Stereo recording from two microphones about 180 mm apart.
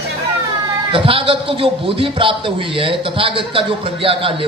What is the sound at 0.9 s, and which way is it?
A man's voice, 30° right (ahead or behind).